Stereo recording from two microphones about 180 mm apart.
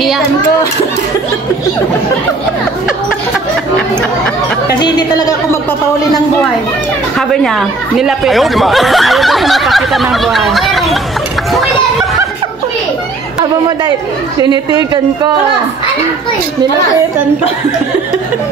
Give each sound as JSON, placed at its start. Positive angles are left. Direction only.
{"t": 4.7, "sound": "a woman's voice", "side_deg": 25}
{"t": 7.2, "sound": "speech", "side_deg": 0}
{"t": 14.4, "sound": "speech", "side_deg": -20}